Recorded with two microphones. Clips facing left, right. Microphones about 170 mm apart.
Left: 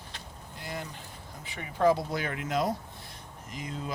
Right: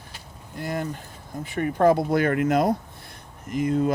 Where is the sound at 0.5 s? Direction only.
50° right (ahead or behind).